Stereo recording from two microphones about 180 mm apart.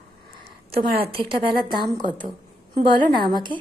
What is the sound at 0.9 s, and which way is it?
Speech, 30° right (ahead or behind).